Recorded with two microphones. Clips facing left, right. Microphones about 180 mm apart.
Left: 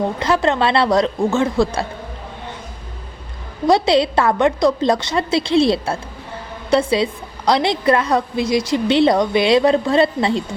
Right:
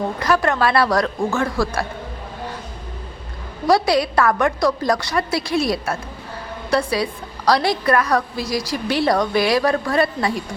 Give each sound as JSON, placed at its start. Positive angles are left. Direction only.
{"t": 0.2, "sound": "a woman's voice", "side_deg": 25}
{"t": 3.7, "sound": "a woman's voice", "side_deg": 25}